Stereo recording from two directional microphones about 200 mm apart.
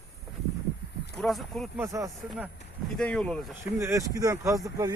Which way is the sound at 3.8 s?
15° right (ahead or behind).